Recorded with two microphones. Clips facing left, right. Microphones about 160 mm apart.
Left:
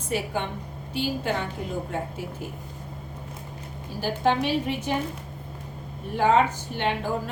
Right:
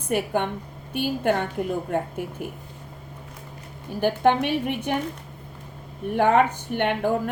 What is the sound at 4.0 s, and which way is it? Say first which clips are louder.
Speech: right 4 dB; 60° right (ahead or behind).